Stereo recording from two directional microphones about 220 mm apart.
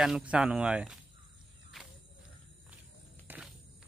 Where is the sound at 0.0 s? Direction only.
5° right (ahead or behind).